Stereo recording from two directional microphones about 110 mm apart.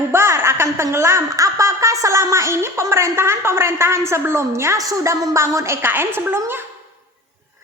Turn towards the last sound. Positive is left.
turn(degrees=-20)  # may be behind; listen again after turning